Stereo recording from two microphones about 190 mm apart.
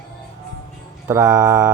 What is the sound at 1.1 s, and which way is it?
Speech, 15° right (ahead or behind).